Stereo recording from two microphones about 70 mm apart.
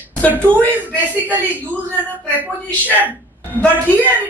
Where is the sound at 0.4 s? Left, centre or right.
Left.